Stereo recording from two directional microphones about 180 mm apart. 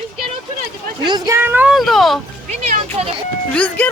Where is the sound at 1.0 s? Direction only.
20° right (ahead or behind); by 2.2 s centre (ahead or behind).